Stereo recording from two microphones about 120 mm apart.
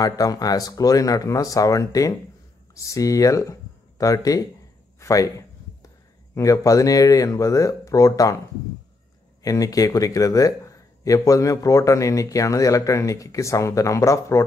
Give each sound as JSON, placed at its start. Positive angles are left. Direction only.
{"t": 0.0, "sound": "speech", "side_deg": 30}
{"t": 6.3, "sound": "speech", "side_deg": 25}
{"t": 9.4, "sound": "speech", "side_deg": 30}